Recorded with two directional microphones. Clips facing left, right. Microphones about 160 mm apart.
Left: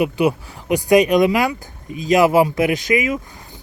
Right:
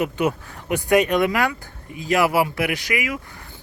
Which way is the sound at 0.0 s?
15° left (ahead or behind).